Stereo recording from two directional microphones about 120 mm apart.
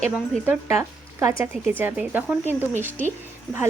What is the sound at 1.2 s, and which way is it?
Speech, 20° right (ahead or behind).